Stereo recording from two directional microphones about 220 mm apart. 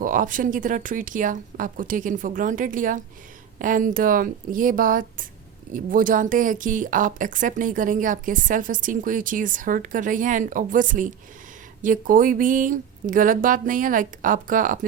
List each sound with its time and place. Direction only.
0.0 s a woman's voice: 35° right (ahead or behind)